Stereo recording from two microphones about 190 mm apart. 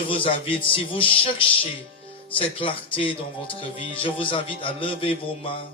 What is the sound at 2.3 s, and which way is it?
Speech, 30° left (ahead or behind).